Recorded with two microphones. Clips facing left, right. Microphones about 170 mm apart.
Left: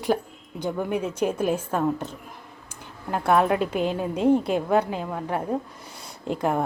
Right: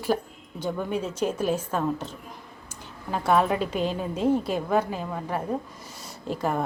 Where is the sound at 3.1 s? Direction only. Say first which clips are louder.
Left 2 dB; 10° left (ahead or behind).